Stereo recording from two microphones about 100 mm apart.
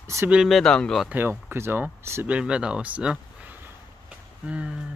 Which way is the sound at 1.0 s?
20° right (ahead or behind).